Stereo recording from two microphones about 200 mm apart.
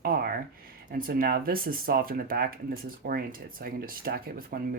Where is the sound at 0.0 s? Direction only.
45° right (ahead or behind).